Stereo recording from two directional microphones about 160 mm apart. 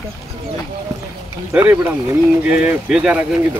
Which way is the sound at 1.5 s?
15° right (ahead or behind).